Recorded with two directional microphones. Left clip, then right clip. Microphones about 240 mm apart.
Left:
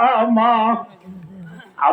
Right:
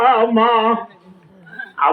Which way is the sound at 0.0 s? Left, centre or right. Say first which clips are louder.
Right 2 dB; right.